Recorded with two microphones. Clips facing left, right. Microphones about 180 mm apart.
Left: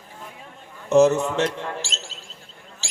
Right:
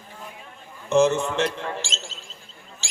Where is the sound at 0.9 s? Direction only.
40° left (ahead or behind).